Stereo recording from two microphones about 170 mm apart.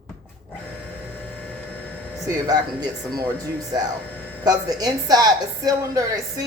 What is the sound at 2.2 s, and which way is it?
Speech, 20° right (ahead or behind).